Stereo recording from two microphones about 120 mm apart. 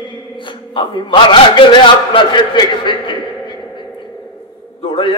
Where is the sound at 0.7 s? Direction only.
45° left (ahead or behind).